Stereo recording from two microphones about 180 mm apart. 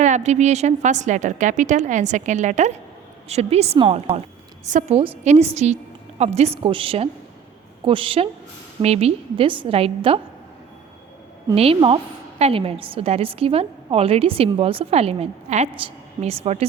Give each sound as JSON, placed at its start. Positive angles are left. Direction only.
{"t": 0.0, "sound": "a woman's voice", "side_deg": -40}
{"t": 4.6, "sound": "a woman's voice", "side_deg": -45}
{"t": 11.5, "sound": "a woman's voice", "side_deg": -30}